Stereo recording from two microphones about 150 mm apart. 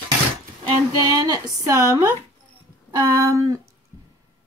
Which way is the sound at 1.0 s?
25° right (ahead or behind).